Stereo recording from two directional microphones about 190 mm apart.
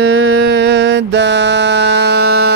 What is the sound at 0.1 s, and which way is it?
Mantra, 75° right (ahead or behind).